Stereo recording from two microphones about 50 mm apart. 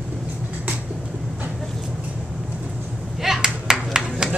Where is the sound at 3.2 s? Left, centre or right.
Centre.